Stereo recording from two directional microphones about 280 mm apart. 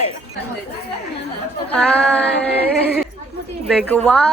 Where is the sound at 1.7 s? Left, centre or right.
Centre.